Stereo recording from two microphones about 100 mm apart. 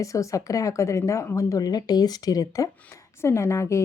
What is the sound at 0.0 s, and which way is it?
A woman's voice, 35° left (ahead or behind).